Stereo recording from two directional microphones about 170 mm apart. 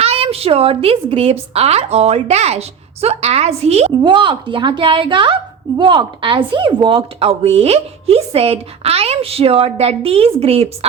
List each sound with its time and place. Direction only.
0.0 s speech: 35° right (ahead or behind)